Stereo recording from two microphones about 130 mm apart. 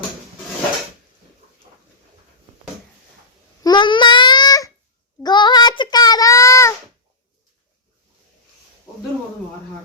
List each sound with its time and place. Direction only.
3.6 s babbling: 35° left (ahead or behind)
5.2 s child singing: 35° left (ahead or behind)